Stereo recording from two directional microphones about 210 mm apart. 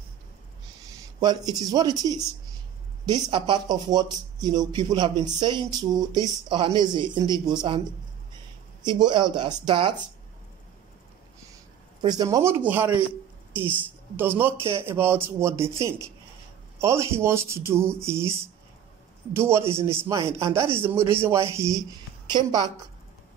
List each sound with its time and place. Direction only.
1.2 s a man's voice: 20° right (ahead or behind)
8.8 s speech: 20° right (ahead or behind)
12.0 s a man's voice: 20° right (ahead or behind)
14.1 s a man's voice: 10° right (ahead or behind)